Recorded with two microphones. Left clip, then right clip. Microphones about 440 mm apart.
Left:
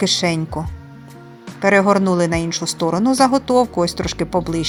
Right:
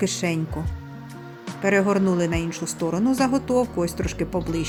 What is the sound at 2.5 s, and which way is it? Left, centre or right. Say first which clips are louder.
Speech: left 7 dB; centre.